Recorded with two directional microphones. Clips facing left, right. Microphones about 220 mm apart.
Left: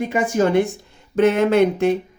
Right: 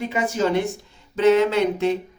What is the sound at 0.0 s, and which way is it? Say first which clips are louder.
Speech: left 4 dB; 50° left (ahead or behind).